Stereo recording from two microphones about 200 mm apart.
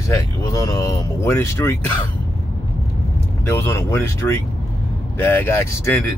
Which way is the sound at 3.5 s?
10° left (ahead or behind).